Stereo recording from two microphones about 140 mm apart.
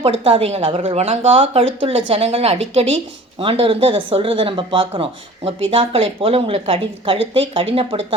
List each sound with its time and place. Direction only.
0.0 s a woman's voice: 45° right (ahead or behind)